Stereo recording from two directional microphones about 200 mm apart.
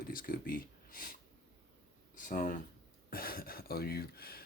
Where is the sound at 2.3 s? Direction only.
45° left (ahead or behind).